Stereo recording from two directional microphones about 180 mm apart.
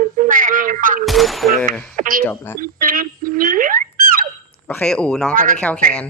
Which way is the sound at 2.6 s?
50° right (ahead or behind).